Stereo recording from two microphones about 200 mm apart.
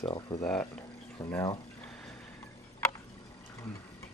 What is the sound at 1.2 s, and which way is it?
Speech, 15° left (ahead or behind).